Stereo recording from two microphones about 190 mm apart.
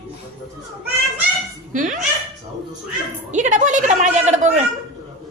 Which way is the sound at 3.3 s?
40° right (ahead or behind).